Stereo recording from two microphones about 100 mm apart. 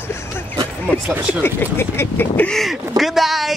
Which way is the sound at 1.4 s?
25° left (ahead or behind).